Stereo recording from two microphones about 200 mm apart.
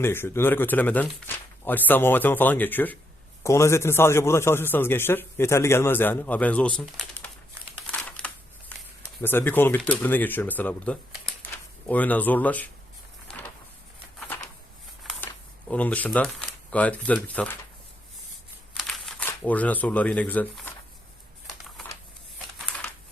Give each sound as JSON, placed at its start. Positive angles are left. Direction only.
{"t": 0.0, "sound": "a man's voice", "side_deg": 10}
{"t": 7.9, "sound": "a sound", "side_deg": 5}
{"t": 9.2, "sound": "a man's voice", "side_deg": 10}
{"t": 15.7, "sound": "a man's voice", "side_deg": 5}
{"t": 18.9, "sound": "speech", "side_deg": 5}